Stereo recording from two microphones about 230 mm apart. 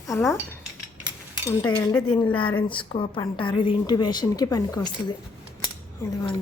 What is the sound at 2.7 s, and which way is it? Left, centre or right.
A woman's voice, left.